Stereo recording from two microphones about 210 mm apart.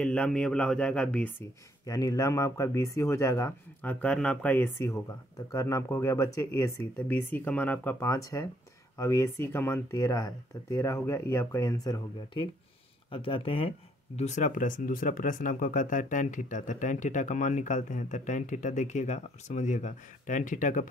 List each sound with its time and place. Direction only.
0.0 s speech: 5° left (ahead or behind)
1.9 s speech: 15° left (ahead or behind); by 20.8 s 35° left (ahead or behind)